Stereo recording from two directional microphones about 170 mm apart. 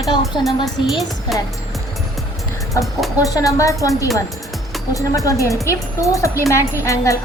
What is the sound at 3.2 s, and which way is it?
A woman's voice, 20° left (ahead or behind).